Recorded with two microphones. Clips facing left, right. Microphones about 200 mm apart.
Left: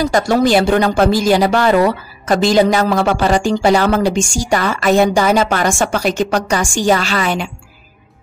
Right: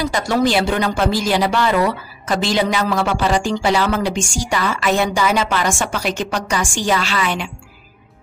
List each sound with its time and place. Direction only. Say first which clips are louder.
0.0 s speech: left 4 dB; 45° left (ahead or behind)